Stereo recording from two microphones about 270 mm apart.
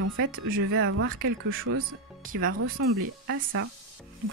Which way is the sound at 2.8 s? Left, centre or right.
Right.